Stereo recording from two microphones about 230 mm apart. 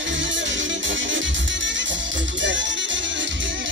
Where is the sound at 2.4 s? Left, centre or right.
Right.